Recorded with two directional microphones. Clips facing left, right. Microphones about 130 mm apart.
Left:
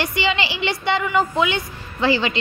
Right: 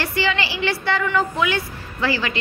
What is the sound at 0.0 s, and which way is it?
A woman's voice, 20° left (ahead or behind).